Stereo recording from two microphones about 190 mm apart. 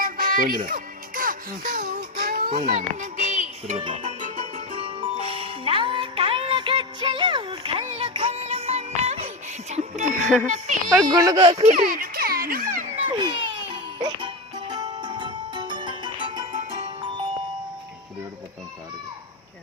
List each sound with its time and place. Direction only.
0.0 s music: 45° right (ahead or behind)
2.2 s a sound: 50° right (ahead or behind)
2.7 s music: 40° right (ahead or behind)
11.0 s speech: 20° right (ahead or behind)
11.5 s music: 40° right (ahead or behind)
13.1 s music: 25° right (ahead or behind)